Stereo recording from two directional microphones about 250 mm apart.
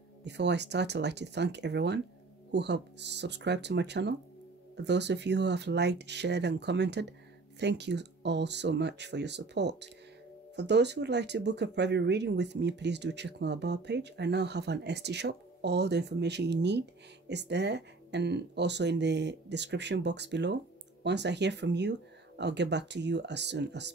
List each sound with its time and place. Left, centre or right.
0.2 s speech: right